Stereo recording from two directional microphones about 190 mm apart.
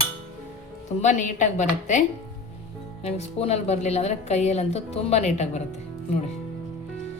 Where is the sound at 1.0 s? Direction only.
40° left (ahead or behind).